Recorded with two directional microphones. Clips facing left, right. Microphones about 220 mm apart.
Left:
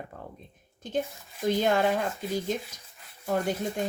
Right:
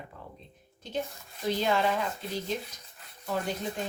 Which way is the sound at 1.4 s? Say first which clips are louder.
Left 3 dB; 50° left (ahead or behind).